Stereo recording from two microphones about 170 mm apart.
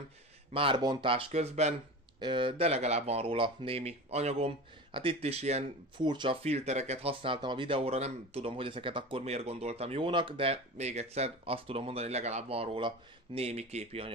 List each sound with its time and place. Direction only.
0.5 s speech: 30° right (ahead or behind)
2.1 s speech: 30° right (ahead or behind)
5.9 s speech: 25° right (ahead or behind)